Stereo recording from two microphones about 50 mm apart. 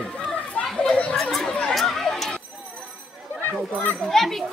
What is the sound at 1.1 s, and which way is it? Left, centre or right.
Speech, centre.